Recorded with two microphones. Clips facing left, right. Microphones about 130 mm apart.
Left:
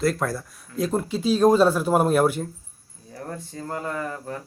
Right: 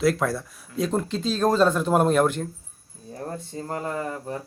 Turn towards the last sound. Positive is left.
turn(degrees=-25)  # may be behind; listen again after turning